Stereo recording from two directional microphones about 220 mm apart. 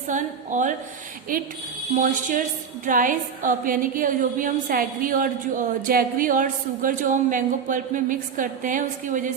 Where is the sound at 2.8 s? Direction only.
40° right (ahead or behind).